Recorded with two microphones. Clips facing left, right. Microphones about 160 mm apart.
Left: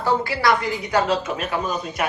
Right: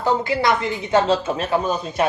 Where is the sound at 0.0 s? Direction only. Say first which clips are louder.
Right 1 dB; 20° right (ahead or behind).